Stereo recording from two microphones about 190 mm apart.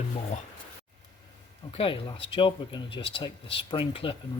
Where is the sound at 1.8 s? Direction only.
30° left (ahead or behind).